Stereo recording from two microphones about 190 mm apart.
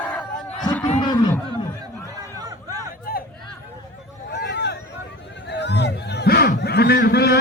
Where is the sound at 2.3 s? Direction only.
20° right (ahead or behind).